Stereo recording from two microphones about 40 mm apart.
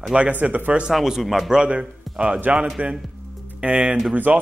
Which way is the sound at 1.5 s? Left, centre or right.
Right.